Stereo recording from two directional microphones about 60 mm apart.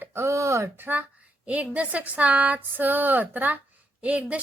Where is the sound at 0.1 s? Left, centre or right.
Right.